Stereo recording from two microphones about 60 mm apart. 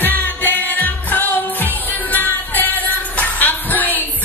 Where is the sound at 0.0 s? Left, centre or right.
Left.